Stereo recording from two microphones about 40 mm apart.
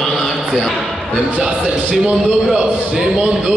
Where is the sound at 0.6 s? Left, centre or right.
Centre.